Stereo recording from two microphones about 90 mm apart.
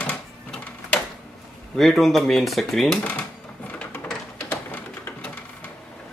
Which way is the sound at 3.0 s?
15° left (ahead or behind).